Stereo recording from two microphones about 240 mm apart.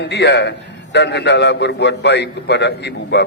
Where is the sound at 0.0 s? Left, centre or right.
Left.